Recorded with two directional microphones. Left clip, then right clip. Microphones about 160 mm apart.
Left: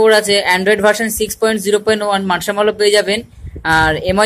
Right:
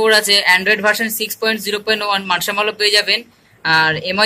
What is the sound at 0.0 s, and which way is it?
Speech, 40° left (ahead or behind).